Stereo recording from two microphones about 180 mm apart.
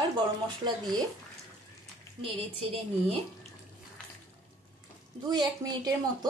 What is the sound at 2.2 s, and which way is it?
Speech, 30° right (ahead or behind).